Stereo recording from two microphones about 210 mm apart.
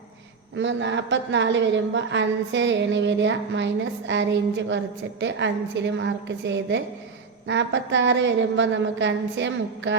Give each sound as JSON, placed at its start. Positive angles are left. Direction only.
{"t": 0.5, "sound": "a woman's voice", "side_deg": -60}